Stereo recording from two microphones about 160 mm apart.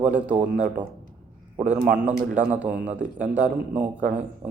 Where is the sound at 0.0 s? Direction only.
10° right (ahead or behind).